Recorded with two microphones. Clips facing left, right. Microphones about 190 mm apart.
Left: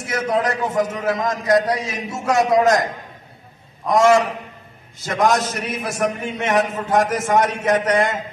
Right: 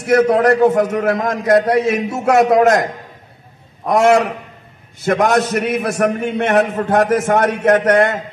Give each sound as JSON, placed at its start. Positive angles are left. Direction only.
{"t": 0.0, "sound": "a man's voice", "side_deg": -60}